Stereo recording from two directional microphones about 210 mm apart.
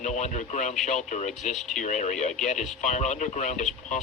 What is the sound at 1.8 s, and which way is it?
Speech, 35° left (ahead or behind).